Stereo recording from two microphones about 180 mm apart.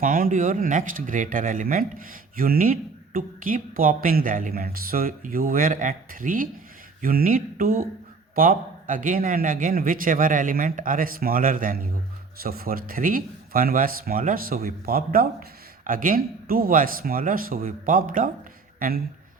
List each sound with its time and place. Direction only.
0.0 s speech: 50° right (ahead or behind)